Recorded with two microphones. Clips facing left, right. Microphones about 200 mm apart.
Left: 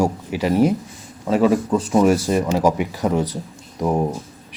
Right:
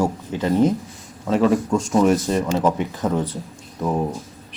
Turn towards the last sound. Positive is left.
turn(degrees=15)  # may be behind; listen again after turning